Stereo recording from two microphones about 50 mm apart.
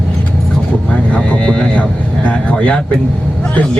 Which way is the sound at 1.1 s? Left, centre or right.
Left.